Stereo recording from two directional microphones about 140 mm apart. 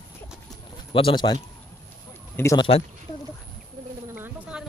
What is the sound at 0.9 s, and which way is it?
Speech, 35° left (ahead or behind).